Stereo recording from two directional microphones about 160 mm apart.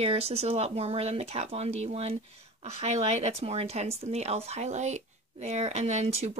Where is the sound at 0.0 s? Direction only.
40° right (ahead or behind).